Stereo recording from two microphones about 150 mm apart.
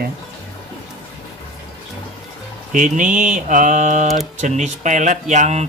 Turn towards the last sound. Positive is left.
turn(degrees=-50)  # may be behind; listen again after turning